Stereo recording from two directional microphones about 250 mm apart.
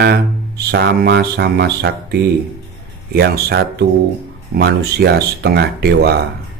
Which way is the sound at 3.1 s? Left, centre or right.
Right.